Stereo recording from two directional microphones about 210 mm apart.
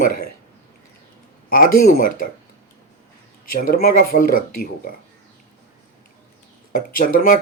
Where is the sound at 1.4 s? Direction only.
45° left (ahead or behind).